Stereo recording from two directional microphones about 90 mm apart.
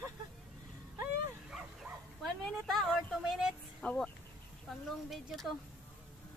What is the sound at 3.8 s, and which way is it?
Speech, 15° left (ahead or behind).